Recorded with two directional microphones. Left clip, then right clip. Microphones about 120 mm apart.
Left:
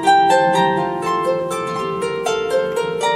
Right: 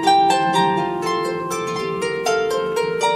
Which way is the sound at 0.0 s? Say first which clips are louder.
Left 2 dB; centre (ahead or behind).